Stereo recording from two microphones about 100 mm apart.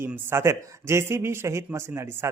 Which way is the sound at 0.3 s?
25° right (ahead or behind).